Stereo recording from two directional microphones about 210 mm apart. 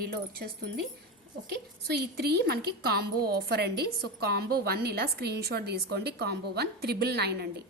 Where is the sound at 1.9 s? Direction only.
50° right (ahead or behind).